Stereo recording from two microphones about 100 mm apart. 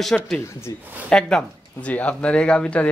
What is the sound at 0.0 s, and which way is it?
Speech, 5° left (ahead or behind).